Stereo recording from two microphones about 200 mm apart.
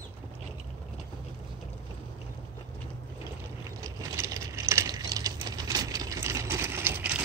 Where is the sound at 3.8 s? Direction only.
20° right (ahead or behind).